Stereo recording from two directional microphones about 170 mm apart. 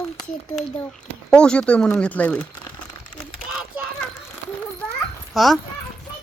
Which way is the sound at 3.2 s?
Centre (ahead or behind).